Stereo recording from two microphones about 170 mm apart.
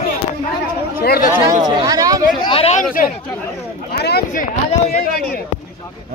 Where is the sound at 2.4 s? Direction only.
35° left (ahead or behind).